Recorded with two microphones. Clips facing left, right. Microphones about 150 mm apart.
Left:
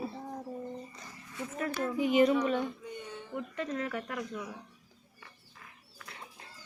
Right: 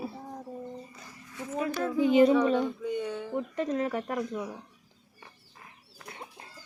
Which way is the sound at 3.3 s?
35° right (ahead or behind).